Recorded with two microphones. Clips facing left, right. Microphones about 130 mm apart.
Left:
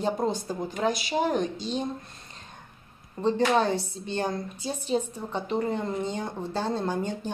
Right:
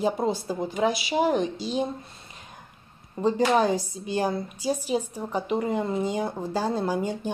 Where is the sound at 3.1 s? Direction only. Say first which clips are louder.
Right 1 dB; 10° right (ahead or behind).